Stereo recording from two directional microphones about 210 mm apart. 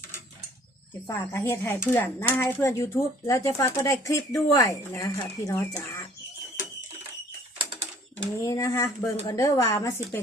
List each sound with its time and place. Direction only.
1.0 s speech: 15° left (ahead or behind)
8.4 s speech: 15° left (ahead or behind)